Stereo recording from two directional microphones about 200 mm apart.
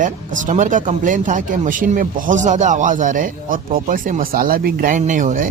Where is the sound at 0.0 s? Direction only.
40° right (ahead or behind).